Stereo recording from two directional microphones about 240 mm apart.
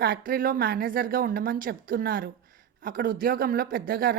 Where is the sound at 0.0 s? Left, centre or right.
Right.